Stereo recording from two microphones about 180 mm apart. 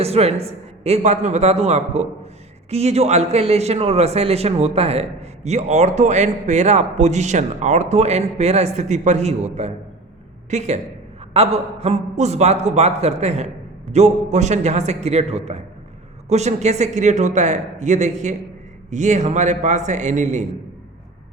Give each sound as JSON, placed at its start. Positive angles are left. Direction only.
{"t": 0.0, "sound": "a man's voice", "side_deg": -35}